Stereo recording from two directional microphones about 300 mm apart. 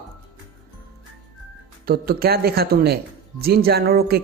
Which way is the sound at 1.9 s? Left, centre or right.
Right.